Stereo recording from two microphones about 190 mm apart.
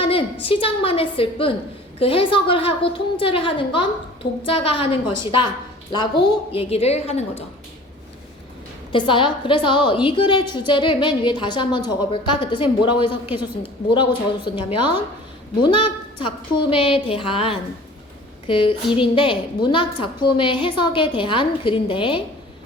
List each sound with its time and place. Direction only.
0.0 s a sound: 30° left (ahead or behind)
0.4 s a woman's voice: 30° left (ahead or behind)
8.9 s a woman's voice: 25° left (ahead or behind)